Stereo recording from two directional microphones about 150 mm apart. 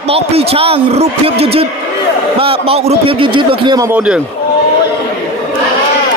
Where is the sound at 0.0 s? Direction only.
40° right (ahead or behind).